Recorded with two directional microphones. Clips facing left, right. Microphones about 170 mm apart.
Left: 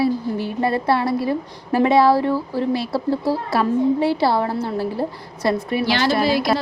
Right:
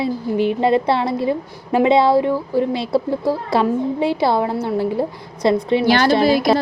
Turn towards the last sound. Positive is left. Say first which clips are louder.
# right 4 dB
turn(degrees=-50)  # may be behind; listen again after turning